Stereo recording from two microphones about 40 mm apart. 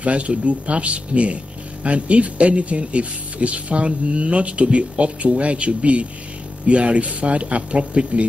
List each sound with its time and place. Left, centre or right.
0.0 s speech: right